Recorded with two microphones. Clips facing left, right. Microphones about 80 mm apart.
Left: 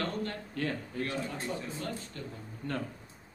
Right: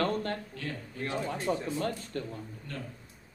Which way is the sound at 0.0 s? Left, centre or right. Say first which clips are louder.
Right 5 dB; right.